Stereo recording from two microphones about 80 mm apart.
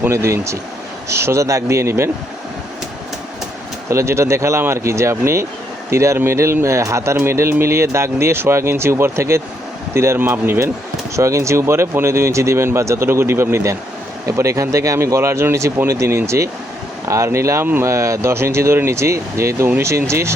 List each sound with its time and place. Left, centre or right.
0.0 s speech: right
3.8 s speech: right
11.2 s speech: right